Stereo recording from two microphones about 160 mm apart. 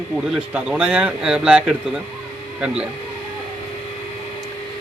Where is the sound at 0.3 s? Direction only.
5° right (ahead or behind).